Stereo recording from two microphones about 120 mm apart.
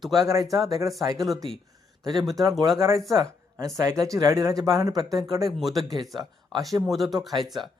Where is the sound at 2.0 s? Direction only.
35° right (ahead or behind).